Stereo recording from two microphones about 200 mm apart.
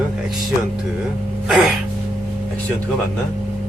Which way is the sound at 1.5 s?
Centre (ahead or behind).